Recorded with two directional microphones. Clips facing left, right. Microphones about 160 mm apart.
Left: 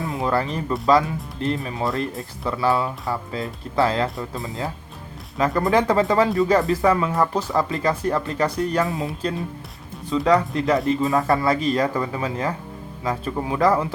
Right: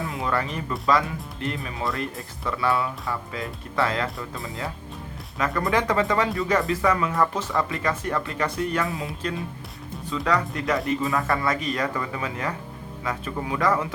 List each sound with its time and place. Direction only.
0.1 s music: 30° left (ahead or behind)
0.9 s speech: 30° left (ahead or behind)